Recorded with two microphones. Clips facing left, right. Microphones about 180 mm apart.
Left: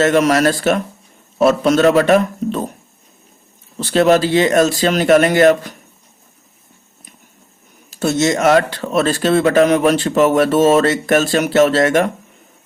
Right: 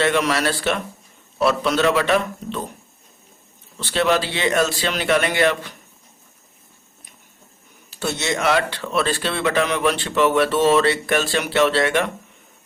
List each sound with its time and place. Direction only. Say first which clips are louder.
0.0 s speech: left 7 dB; 45° left (ahead or behind)
3.8 s speech: left 7 dB; 40° left (ahead or behind)
7.9 s speech: left 9 dB; 45° left (ahead or behind)